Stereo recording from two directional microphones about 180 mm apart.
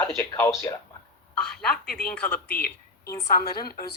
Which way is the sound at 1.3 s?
5° left (ahead or behind).